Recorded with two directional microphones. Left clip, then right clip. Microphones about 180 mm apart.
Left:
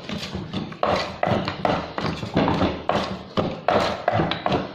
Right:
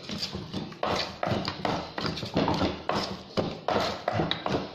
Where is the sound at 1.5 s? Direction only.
Centre (ahead or behind).